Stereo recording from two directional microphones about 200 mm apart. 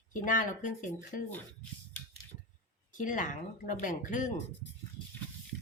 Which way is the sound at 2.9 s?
40° left (ahead or behind).